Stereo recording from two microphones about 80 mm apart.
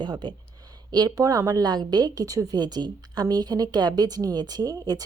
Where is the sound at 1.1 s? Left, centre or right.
Right.